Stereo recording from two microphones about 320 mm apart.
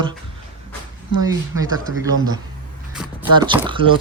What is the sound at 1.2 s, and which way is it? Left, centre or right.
Speech, centre.